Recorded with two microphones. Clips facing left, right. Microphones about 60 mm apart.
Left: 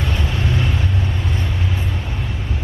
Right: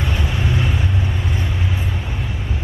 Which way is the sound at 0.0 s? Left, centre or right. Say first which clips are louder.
Even; centre.